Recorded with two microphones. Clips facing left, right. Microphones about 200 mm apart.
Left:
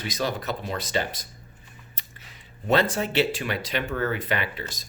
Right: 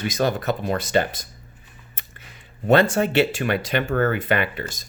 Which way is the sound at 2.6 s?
50° right (ahead or behind).